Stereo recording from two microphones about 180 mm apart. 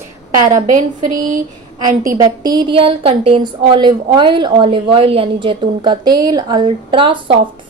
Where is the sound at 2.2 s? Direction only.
20° right (ahead or behind).